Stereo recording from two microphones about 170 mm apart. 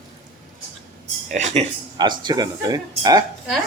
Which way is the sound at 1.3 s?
45° right (ahead or behind).